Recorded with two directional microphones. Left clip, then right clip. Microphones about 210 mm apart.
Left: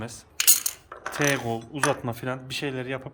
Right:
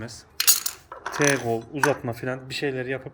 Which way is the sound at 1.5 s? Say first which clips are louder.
Right 4 dB; 70° left (ahead or behind).